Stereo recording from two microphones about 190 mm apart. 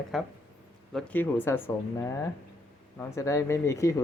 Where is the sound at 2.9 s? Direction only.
15° left (ahead or behind).